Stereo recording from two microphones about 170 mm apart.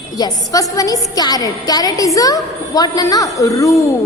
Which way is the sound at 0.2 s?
25° left (ahead or behind).